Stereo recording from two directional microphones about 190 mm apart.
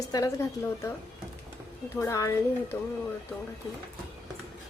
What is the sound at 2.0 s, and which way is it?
Speech, 15° left (ahead or behind).